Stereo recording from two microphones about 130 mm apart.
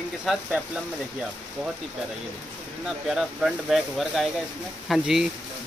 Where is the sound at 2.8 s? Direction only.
5° right (ahead or behind).